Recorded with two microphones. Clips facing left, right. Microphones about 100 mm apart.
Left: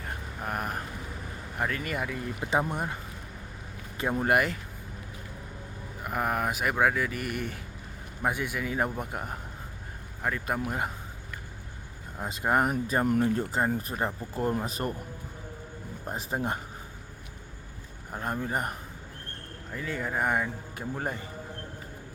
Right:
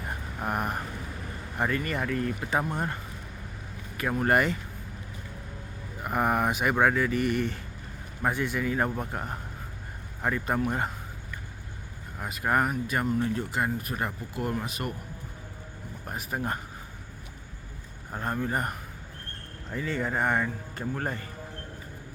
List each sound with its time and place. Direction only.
0.0 s vehicle: 5° right (ahead or behind)
1.5 s a man's voice: centre (ahead or behind)
4.1 s speech: 5° left (ahead or behind)
6.0 s a man's voice: centre (ahead or behind)
12.2 s speech: 25° left (ahead or behind)
12.7 s speech: 35° left (ahead or behind)
13.1 s speech: 50° left (ahead or behind)
16.0 s speech: 25° left (ahead or behind)
18.1 s a man's voice: 5° left (ahead or behind)
19.7 s a man's voice: centre (ahead or behind)